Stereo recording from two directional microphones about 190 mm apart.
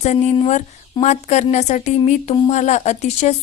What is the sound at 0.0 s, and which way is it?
A woman's voice, 35° left (ahead or behind).